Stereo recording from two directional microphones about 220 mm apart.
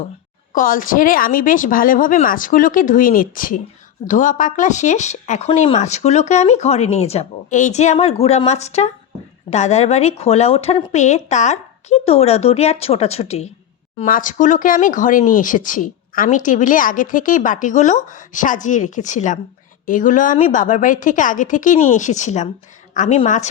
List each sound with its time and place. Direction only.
0.5 s speech: 40° left (ahead or behind)